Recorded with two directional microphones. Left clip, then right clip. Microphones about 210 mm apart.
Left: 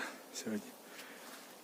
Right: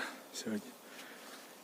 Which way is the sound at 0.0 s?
5° right (ahead or behind).